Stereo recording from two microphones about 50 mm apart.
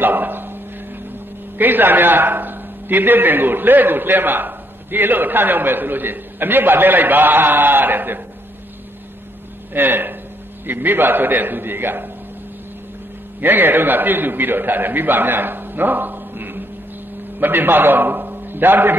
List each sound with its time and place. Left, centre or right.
0.0 s a sound: right
1.6 s a man's voice: right
9.8 s a man's voice: right
13.4 s a man's voice: right